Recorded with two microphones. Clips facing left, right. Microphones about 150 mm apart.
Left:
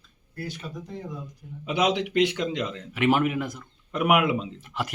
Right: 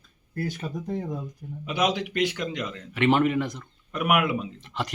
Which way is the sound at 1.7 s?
20° left (ahead or behind).